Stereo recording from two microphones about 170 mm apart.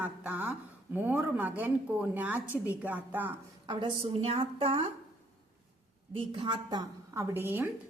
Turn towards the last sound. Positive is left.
turn(degrees=-10)  # may be behind; listen again after turning